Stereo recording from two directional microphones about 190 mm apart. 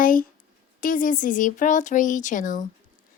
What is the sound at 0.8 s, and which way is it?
Speech, 45° left (ahead or behind).